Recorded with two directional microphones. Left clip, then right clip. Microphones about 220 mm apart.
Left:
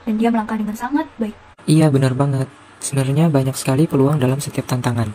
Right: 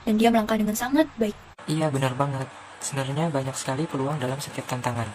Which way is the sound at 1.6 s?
25° left (ahead or behind).